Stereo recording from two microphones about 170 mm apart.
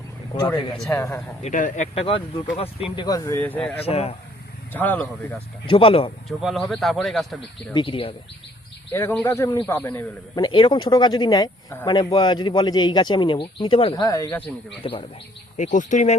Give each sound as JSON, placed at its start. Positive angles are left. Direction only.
{"t": 0.9, "sound": "speech", "side_deg": 15}
{"t": 1.4, "sound": "speech", "side_deg": 45}
{"t": 3.8, "sound": "speech", "side_deg": 35}
{"t": 4.7, "sound": "speech", "side_deg": 10}
{"t": 5.6, "sound": "speech", "side_deg": 30}
{"t": 6.2, "sound": "speech", "side_deg": 0}
{"t": 7.7, "sound": "speech", "side_deg": 30}
{"t": 8.9, "sound": "speech", "side_deg": 15}
{"t": 10.3, "sound": "a man's voice", "side_deg": 25}
{"t": 13.9, "sound": "a man's voice", "side_deg": 20}
{"t": 14.8, "sound": "speech", "side_deg": 30}
{"t": 15.5, "sound": "speech", "side_deg": 45}